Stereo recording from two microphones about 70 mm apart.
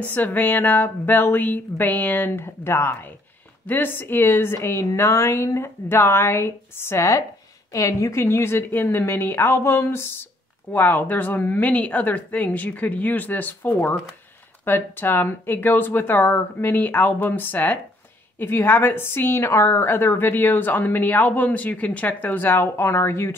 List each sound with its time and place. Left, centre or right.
0.0 s a woman's voice: left
7.7 s a woman's voice: left